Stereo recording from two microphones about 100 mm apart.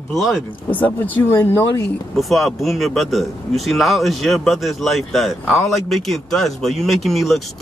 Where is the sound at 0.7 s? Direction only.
20° left (ahead or behind).